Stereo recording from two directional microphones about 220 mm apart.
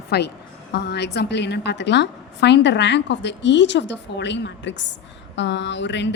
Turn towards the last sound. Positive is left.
turn(degrees=55)  # may be behind; listen again after turning